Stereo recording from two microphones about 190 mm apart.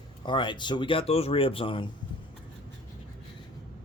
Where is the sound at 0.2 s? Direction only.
25° left (ahead or behind).